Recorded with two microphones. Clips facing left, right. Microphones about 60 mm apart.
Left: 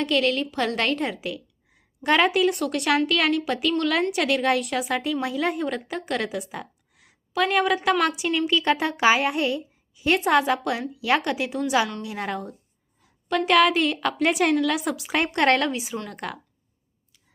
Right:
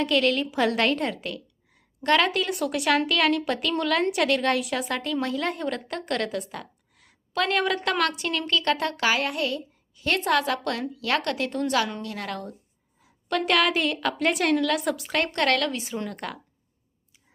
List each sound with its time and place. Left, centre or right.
0.0 s a woman's voice: centre
2.5 s a woman's voice: centre
12.0 s a woman's voice: centre
13.0 s a woman's voice: centre
15.4 s a woman's voice: left
15.7 s a woman's voice: centre